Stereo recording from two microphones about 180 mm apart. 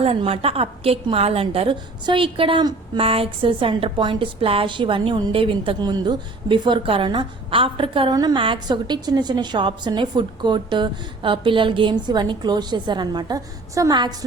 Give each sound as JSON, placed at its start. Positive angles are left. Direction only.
{"t": 0.0, "sound": "a woman's voice", "side_deg": -30}